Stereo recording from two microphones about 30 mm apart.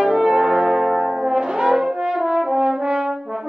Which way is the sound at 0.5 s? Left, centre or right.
Centre.